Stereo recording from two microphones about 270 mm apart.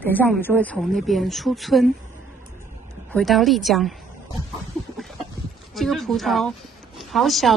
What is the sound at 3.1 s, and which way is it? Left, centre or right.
Speech, centre.